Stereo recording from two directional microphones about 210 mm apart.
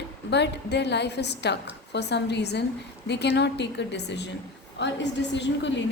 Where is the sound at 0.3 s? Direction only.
55° left (ahead or behind).